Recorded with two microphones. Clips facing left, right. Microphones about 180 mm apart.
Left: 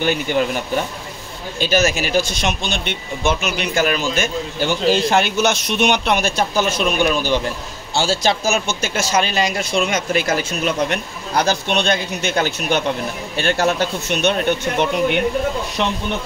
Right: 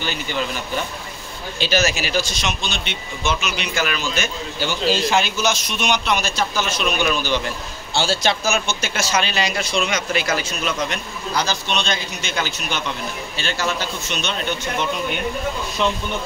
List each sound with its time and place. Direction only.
0.0 s speech: 55° left (ahead or behind)
1.6 s speech: 50° left (ahead or behind)
7.9 s speech: 45° left (ahead or behind); by 15.2 s 65° left (ahead or behind)